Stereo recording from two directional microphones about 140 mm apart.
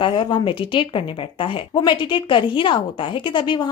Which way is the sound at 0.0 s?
35° left (ahead or behind).